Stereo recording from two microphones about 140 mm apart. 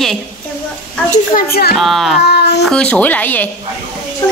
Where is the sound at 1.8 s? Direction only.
Centre (ahead or behind).